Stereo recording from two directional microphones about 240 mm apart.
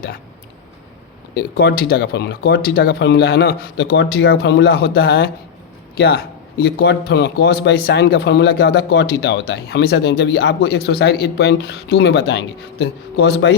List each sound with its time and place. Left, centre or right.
1.3 s a man's voice: left